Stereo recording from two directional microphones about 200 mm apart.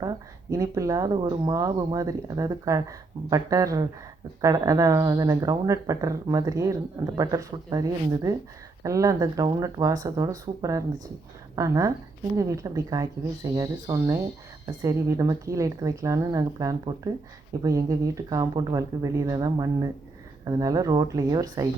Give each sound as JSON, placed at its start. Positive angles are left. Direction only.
{"t": 0.0, "sound": "speech", "side_deg": -15}